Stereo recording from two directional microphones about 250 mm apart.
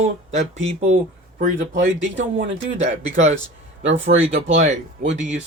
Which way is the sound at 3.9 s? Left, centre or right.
Right.